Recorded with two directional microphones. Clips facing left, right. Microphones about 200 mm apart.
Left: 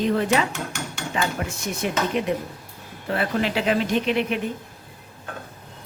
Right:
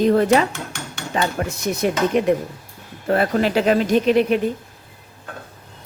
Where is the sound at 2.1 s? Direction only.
50° right (ahead or behind).